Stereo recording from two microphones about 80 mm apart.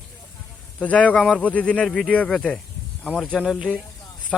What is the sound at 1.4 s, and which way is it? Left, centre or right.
Speech, centre.